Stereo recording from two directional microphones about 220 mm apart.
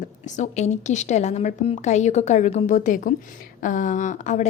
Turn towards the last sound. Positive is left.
turn(degrees=35)  # may be behind; listen again after turning